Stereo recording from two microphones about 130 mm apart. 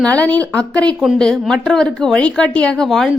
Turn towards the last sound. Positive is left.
turn(degrees=0)  # may be behind; listen again after turning